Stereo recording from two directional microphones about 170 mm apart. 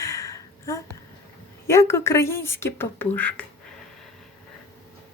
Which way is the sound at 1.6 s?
15° left (ahead or behind).